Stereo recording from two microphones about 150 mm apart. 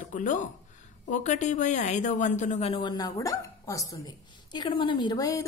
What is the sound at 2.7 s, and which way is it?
A woman's voice, 30° left (ahead or behind).